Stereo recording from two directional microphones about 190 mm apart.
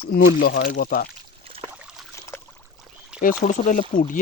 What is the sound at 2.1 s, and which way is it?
Trickle, 15° left (ahead or behind).